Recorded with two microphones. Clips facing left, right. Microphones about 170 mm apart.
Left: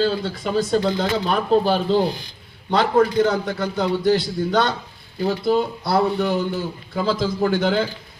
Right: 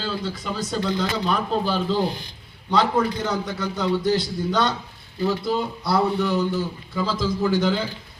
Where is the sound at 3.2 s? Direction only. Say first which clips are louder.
Left 4 dB; 50° left (ahead or behind).